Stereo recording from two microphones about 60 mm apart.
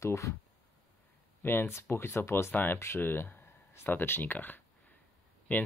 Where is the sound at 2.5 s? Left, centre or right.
Left.